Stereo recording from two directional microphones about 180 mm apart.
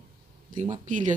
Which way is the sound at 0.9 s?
45° right (ahead or behind).